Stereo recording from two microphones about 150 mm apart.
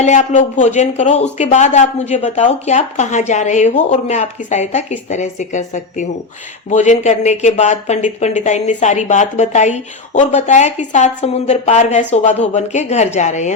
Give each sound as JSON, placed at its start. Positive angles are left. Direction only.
{"t": 0.0, "sound": "speech", "side_deg": 55}